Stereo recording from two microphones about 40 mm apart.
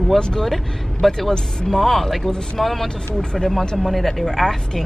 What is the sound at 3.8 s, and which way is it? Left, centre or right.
Speech, centre.